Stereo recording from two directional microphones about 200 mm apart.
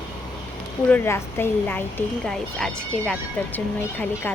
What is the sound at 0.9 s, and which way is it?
Speech, 10° left (ahead or behind).